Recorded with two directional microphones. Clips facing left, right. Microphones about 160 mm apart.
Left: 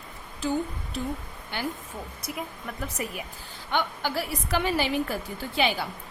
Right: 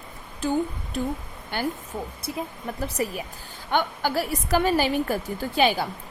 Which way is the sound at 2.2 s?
30° right (ahead or behind).